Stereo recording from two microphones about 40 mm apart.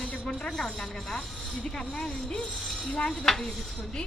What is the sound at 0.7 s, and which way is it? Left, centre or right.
A woman's voice, centre.